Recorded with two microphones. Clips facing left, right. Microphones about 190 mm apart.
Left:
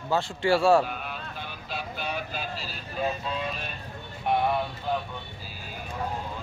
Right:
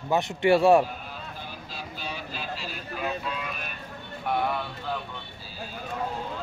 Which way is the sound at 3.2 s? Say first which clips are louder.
Left 2 dB; 30° left (ahead or behind).